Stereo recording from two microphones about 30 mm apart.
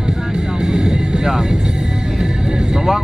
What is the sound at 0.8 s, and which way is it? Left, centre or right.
Vehicle, right.